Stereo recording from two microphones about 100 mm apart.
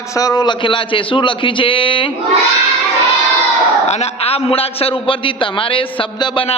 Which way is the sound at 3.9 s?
90° left.